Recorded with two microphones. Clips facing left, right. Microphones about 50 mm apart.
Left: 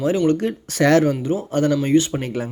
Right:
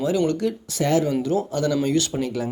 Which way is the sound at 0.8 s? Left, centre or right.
Left.